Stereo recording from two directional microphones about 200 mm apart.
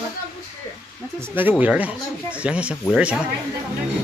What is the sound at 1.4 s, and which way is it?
Speech, 10° right (ahead or behind).